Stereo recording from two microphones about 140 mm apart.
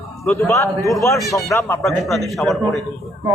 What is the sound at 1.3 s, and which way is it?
Speech, 20° left (ahead or behind).